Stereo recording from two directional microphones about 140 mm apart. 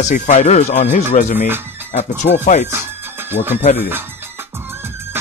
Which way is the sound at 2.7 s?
15° right (ahead or behind).